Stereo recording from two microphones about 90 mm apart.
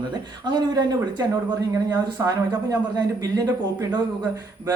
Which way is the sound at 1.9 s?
35° right (ahead or behind).